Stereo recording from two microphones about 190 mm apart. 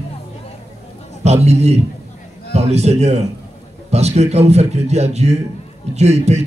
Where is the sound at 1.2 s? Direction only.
35° right (ahead or behind).